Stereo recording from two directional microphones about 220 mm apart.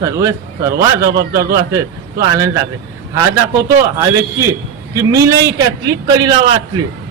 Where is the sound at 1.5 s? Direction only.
15° right (ahead or behind).